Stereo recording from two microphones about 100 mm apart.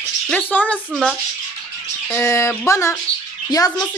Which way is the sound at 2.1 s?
30° left (ahead or behind).